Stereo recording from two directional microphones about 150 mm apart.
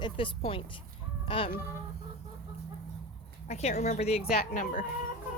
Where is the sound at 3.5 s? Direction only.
50° left (ahead or behind).